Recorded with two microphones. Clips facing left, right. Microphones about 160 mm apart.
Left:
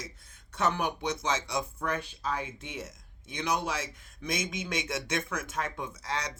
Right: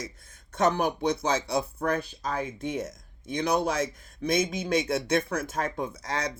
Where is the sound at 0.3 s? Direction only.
40° right (ahead or behind).